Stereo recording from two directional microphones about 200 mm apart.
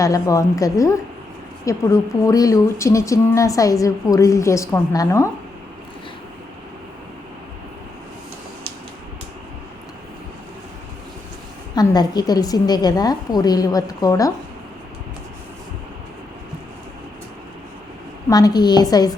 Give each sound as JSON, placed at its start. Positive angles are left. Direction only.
{"t": 0.0, "sound": "speech", "side_deg": 15}
{"t": 11.7, "sound": "a woman's voice", "side_deg": 20}
{"t": 18.3, "sound": "a woman's voice", "side_deg": 20}